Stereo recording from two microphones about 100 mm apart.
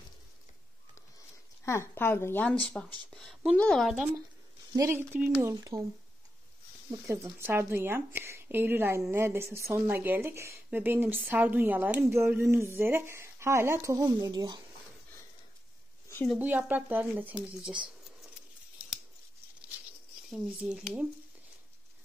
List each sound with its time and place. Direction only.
1.6 s speech: 30° left (ahead or behind)
2.4 s a woman's voice: 10° left (ahead or behind)
4.7 s speech: 25° right (ahead or behind)
5.4 s speech: 35° right (ahead or behind)
7.3 s speech: 25° right (ahead or behind)
16.3 s speech: 15° right (ahead or behind)
20.2 s speech: 5° right (ahead or behind)